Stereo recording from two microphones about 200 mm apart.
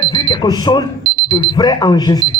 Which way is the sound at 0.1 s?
20° left (ahead or behind).